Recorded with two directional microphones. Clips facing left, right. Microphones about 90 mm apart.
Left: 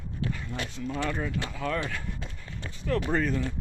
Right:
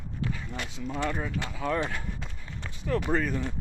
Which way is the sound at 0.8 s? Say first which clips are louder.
Even; 15° right (ahead or behind).